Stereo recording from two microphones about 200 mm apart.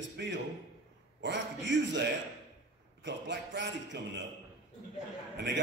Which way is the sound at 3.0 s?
65° right (ahead or behind).